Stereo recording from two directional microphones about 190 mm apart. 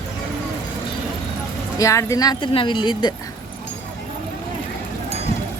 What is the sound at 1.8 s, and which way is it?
Speech, 15° left (ahead or behind).